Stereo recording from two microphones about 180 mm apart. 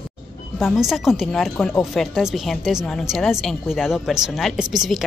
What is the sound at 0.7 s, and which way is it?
Speech, centre (ahead or behind).